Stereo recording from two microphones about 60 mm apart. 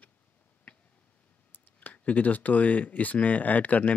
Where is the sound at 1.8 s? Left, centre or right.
Left.